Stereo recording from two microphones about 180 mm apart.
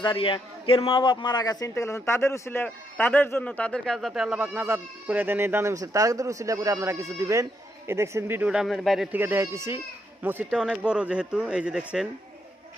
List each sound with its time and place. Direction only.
0.0 s a man's voice: 25° left (ahead or behind); by 9.0 s centre (ahead or behind)
9.1 s speech: 10° right (ahead or behind)
10.5 s speech: centre (ahead or behind)